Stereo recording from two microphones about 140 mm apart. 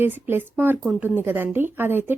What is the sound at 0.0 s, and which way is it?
Speech, 15° right (ahead or behind).